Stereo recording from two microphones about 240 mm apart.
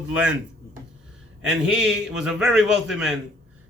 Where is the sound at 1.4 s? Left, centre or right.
Centre.